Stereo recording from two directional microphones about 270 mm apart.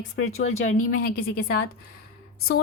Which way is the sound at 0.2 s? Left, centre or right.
Left.